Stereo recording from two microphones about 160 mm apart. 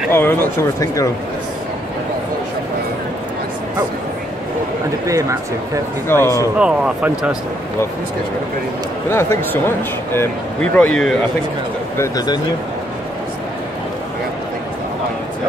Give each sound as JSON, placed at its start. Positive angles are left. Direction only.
{"t": 0.1, "sound": "speech", "side_deg": 15}
{"t": 5.0, "sound": "speech", "side_deg": -20}
{"t": 6.0, "sound": "speech", "side_deg": 15}
{"t": 6.6, "sound": "speech", "side_deg": -5}
{"t": 9.1, "sound": "speech", "side_deg": 15}
{"t": 12.0, "sound": "speech", "side_deg": 25}